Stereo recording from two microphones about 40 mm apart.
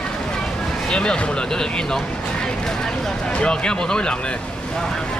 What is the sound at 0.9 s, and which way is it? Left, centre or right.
Speech, left.